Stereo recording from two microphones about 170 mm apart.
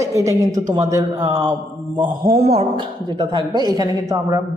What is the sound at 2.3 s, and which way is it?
A woman's voice, 35° right (ahead or behind).